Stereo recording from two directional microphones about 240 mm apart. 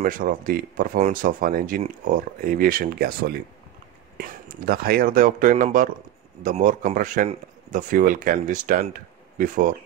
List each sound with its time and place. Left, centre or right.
0.0 s speech: right